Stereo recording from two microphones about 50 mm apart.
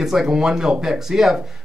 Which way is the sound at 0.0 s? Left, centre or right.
Centre.